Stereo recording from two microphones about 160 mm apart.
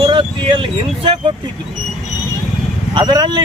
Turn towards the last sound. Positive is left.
turn(degrees=-25)  # may be behind; listen again after turning